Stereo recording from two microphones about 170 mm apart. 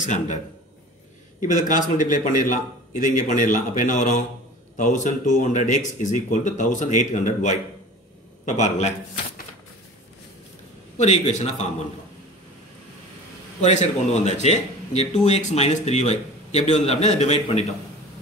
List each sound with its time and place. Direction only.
0.0 s a man's voice: 45° left (ahead or behind)
1.4 s a man's voice: 50° left (ahead or behind)
11.0 s a man's voice: 40° left (ahead or behind)
13.6 s a man's voice: 40° left (ahead or behind)